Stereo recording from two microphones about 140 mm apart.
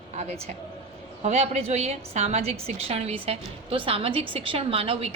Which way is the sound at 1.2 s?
50° right (ahead or behind).